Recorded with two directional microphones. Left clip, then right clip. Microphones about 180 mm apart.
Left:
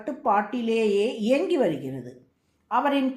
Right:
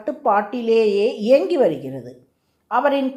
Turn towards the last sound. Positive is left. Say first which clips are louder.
# right 5 dB
turn(degrees=-35)  # may be behind; listen again after turning